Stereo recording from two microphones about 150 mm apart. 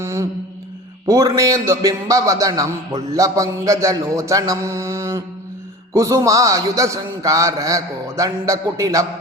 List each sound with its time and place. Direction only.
0.0 s mantra: 20° right (ahead or behind)
1.0 s a man's voice: 20° right (ahead or behind)